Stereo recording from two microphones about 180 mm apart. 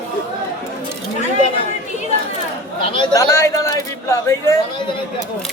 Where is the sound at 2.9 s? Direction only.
20° left (ahead or behind).